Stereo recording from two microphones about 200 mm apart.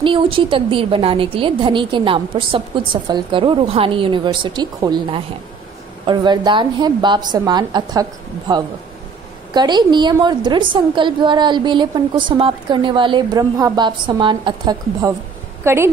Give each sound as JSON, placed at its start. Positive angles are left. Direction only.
{"t": 0.0, "sound": "a woman's voice", "side_deg": -25}